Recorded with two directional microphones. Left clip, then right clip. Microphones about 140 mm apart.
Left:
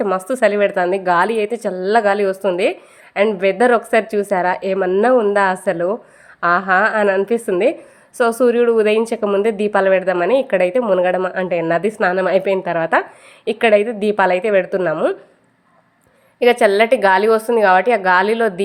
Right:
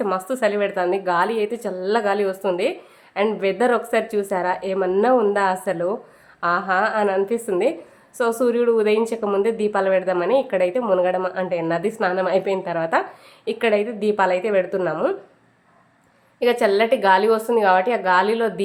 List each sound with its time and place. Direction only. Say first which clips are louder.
0.3 s a woman's voice: left 6 dB; 45° left (ahead or behind)
6.4 s a woman's voice: left 5 dB; 50° left (ahead or behind); by 15.1 s 30° left (ahead or behind)
16.4 s a woman's voice: left 5 dB; 45° left (ahead or behind)